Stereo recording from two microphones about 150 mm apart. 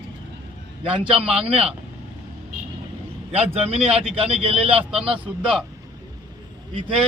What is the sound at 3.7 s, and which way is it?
Speech, 40° right (ahead or behind).